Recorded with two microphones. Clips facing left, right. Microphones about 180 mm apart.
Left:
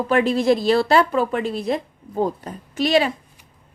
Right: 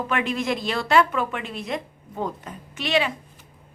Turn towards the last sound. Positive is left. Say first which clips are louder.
# left 6 dB
turn(degrees=40)  # may be behind; listen again after turning